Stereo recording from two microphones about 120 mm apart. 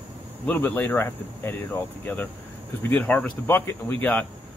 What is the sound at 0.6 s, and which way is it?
Speech, 15° left (ahead or behind).